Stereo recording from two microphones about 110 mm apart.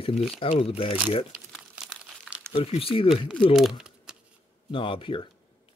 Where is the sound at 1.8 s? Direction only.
10° right (ahead or behind).